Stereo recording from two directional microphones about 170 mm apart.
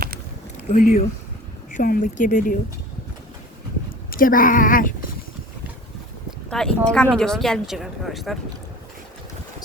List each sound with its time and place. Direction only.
0.7 s speech: 55° left (ahead or behind)
4.1 s speech: 55° left (ahead or behind)
6.5 s speech: 5° left (ahead or behind)